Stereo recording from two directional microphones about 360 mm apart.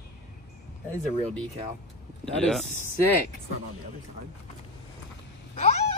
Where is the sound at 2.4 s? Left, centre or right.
Centre.